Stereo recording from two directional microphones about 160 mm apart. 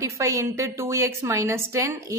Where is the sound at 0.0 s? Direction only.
20° right (ahead or behind).